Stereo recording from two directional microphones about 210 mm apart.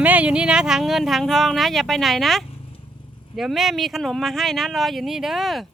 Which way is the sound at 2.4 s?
25° left (ahead or behind).